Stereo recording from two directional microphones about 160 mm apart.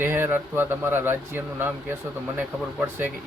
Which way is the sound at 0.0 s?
15° right (ahead or behind).